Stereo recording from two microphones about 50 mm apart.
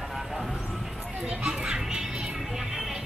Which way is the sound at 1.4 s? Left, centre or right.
Centre.